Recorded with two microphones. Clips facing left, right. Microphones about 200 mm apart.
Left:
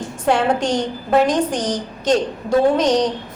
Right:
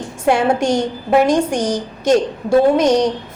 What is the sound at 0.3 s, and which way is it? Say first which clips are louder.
A woman's voice: right 3 dB; 10° right (ahead or behind).